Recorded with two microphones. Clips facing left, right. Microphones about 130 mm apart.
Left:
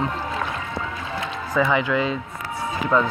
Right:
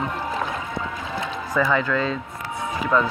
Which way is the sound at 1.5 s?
10° left (ahead or behind).